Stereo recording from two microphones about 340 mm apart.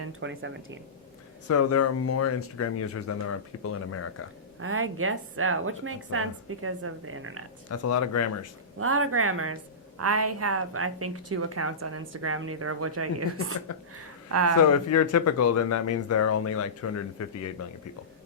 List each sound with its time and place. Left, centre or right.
0.0 s a woman's voice: right
1.5 s speech: left
4.6 s a woman's voice: right
7.7 s speech: left
8.8 s a woman's voice: right
14.7 s speech: left